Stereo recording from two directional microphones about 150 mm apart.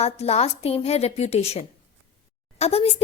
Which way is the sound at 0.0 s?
45° left (ahead or behind).